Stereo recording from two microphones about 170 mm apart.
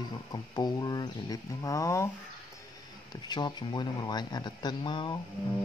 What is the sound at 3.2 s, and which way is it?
Speech, 25° left (ahead or behind).